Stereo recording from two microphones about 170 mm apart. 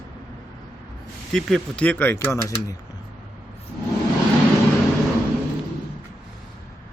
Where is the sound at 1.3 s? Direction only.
Centre (ahead or behind).